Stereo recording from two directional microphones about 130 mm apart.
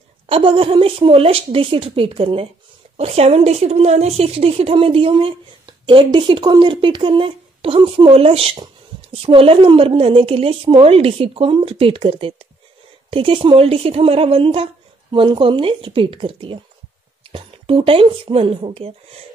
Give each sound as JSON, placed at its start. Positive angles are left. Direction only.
{"t": 0.3, "sound": "a woman's voice", "side_deg": -45}